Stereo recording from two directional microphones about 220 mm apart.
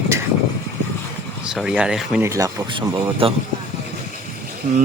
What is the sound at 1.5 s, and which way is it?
Speech, 5° right (ahead or behind).